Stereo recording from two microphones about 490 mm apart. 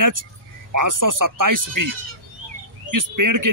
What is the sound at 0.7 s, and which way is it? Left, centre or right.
Speech, right.